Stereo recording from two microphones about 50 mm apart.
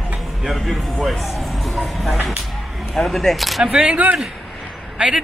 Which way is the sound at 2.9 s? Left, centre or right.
Centre.